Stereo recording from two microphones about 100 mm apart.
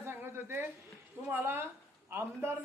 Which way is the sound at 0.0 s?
25° right (ahead or behind).